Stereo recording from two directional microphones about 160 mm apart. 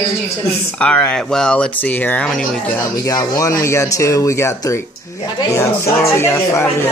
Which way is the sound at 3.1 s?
20° left (ahead or behind).